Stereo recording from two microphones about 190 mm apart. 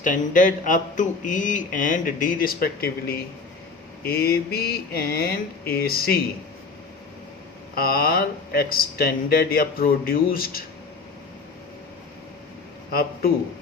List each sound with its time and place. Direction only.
0.0 s speech: 45° left (ahead or behind)
7.8 s speech: 50° left (ahead or behind)
12.9 s speech: 50° left (ahead or behind)